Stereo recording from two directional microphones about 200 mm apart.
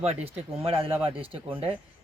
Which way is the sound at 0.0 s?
30° right (ahead or behind).